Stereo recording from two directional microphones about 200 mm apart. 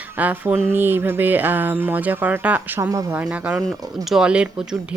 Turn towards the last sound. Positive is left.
turn(degrees=-5)  # may be behind; listen again after turning